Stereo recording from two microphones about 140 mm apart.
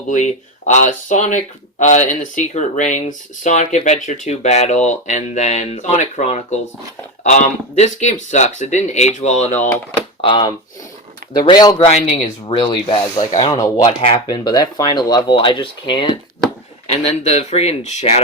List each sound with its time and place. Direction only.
0.1 s speech: 60° left (ahead or behind)
10.2 s speech: 35° left (ahead or behind)
12.1 s speech: 40° left (ahead or behind)
16.9 s speech: 50° left (ahead or behind)